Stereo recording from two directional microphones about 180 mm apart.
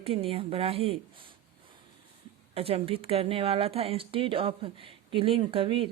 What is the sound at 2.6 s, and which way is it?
Speech, 30° right (ahead or behind).